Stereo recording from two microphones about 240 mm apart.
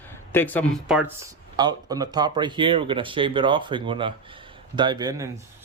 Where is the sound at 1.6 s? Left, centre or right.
Centre.